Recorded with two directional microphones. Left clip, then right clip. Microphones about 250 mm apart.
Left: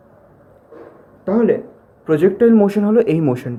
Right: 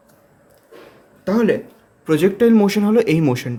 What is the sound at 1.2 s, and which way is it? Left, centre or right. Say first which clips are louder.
Speech: left 2 dB; right.